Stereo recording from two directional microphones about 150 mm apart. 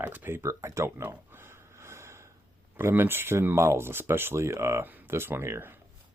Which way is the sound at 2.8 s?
15° right (ahead or behind).